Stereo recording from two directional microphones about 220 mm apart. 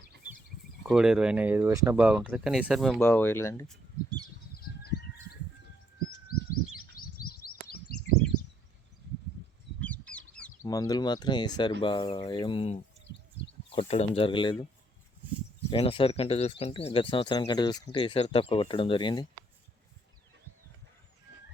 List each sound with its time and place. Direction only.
0.9 s speech: 5° right (ahead or behind)
4.5 s bird: 45° left (ahead or behind)
6.2 s bird: 40° left (ahead or behind)
9.8 s bird: 5° left (ahead or behind)
10.6 s speech: 15° left (ahead or behind)
15.7 s speech: 25° left (ahead or behind)